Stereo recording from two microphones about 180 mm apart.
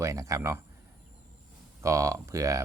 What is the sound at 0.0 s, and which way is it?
Speech, 15° right (ahead or behind).